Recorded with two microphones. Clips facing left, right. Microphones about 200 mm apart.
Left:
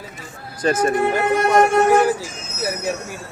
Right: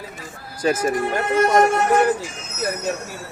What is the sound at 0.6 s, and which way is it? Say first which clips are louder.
Speech: left 1 dB; 5° right (ahead or behind).